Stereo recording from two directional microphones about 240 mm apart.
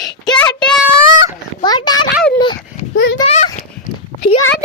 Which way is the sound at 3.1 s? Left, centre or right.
Left.